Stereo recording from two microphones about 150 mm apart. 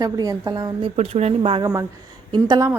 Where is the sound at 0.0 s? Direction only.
25° right (ahead or behind).